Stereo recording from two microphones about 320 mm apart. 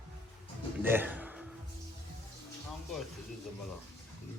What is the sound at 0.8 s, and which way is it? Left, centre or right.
Music, centre.